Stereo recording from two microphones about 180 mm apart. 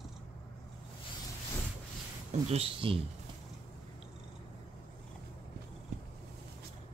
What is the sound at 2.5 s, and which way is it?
Speech, 30° right (ahead or behind).